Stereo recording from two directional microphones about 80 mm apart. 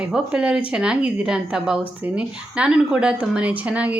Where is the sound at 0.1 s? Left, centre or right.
Centre.